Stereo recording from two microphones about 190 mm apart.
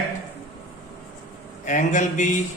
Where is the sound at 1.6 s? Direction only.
40° left (ahead or behind).